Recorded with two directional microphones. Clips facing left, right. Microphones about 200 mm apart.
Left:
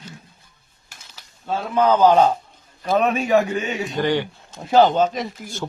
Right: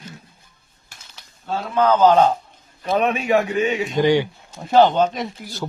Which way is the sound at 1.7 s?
15° left (ahead or behind).